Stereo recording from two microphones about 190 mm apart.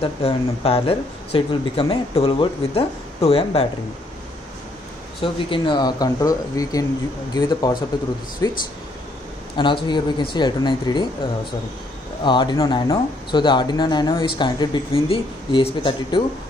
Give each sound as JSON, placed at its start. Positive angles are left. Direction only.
{"t": 0.0, "sound": "speech", "side_deg": 30}
{"t": 5.2, "sound": "speech", "side_deg": 25}
{"t": 9.6, "sound": "speech", "side_deg": 25}
{"t": 12.2, "sound": "speech", "side_deg": 25}